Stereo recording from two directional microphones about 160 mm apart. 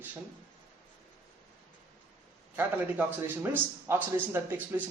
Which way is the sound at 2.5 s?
10° right (ahead or behind).